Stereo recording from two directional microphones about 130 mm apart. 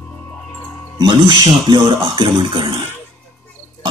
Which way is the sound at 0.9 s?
35° right (ahead or behind).